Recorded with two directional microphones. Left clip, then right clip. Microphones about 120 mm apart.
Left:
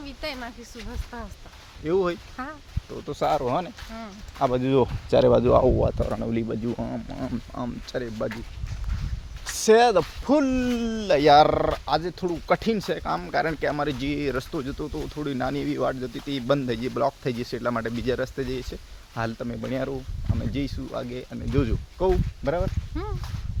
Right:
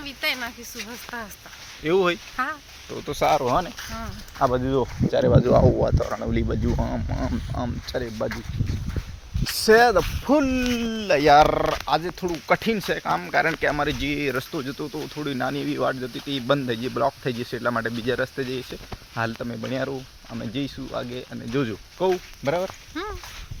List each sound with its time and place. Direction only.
0.0 s speech: 5° left (ahead or behind)
0.3 s speech: 20° right (ahead or behind)
1.8 s speech: 35° right (ahead or behind)
2.3 s speech: 10° right (ahead or behind)
3.1 s speech: 30° right (ahead or behind)
4.4 s speech: 15° right (ahead or behind)
5.1 s speech: 35° left (ahead or behind)
5.5 s speech: 10° left (ahead or behind)
6.0 s speech: 10° right (ahead or behind)
6.7 s speech: 25° right (ahead or behind)
7.5 s speech: 20° right (ahead or behind)
9.6 s speech: 15° right (ahead or behind)
10.4 s speech: 5° right (ahead or behind)
23.0 s a sound: centre (ahead or behind)